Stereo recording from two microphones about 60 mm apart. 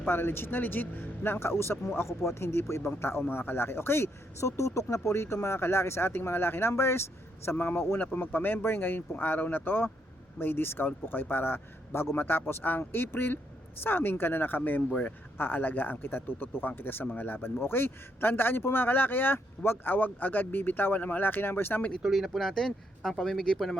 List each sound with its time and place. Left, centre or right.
0.0 s a man's voice: left
22.0 s speech: centre